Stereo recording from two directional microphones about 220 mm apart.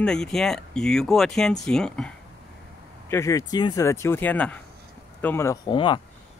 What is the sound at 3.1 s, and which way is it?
Speech, 15° left (ahead or behind).